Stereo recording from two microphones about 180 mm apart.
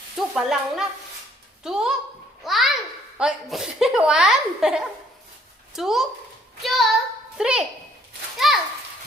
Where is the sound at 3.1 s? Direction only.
Centre (ahead or behind).